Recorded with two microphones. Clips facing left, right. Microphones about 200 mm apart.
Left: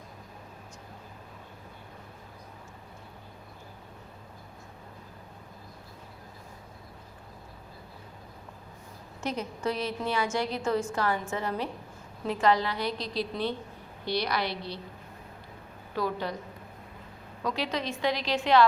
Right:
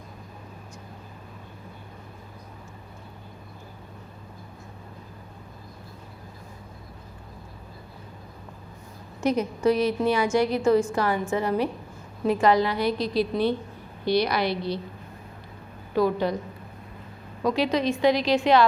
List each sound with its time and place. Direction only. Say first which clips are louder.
9.2 s a woman's voice: right 9 dB; 15° right (ahead or behind)
16.0 s a woman's voice: right 8 dB; 15° right (ahead or behind)
17.4 s a woman's voice: right 8 dB; 15° right (ahead or behind)